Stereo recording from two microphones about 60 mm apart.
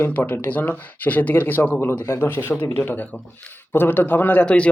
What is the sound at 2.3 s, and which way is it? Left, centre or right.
A man's voice, left.